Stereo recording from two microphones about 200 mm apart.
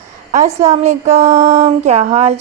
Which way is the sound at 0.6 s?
35° right (ahead or behind).